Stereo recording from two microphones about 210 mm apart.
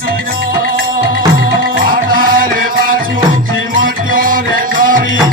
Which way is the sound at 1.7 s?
45° right (ahead or behind).